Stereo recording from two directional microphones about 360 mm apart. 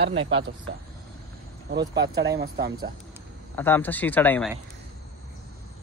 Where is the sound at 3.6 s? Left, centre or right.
Centre.